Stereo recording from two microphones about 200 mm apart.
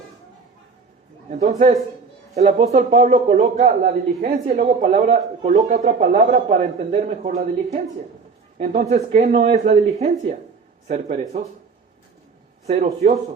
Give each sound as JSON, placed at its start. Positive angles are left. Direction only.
{"t": 1.3, "sound": "a man's voice", "side_deg": -35}
{"t": 12.6, "sound": "a man's voice", "side_deg": -35}